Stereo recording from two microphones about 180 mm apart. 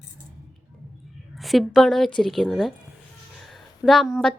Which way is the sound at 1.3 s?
Centre (ahead or behind).